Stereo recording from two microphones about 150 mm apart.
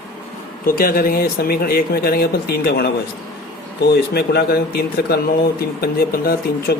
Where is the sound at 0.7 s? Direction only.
75° left (ahead or behind).